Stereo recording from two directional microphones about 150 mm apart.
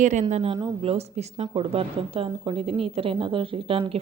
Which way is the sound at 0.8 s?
45° right (ahead or behind).